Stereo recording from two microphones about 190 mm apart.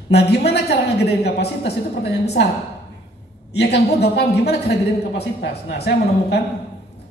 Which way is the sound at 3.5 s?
60° left (ahead or behind).